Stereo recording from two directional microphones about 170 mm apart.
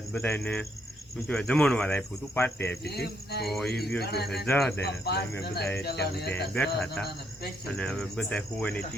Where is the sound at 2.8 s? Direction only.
70° left (ahead or behind).